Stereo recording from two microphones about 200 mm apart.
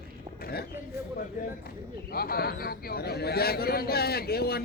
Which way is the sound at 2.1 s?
50° left (ahead or behind).